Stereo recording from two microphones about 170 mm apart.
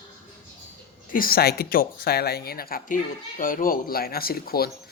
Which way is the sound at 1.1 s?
60° left (ahead or behind).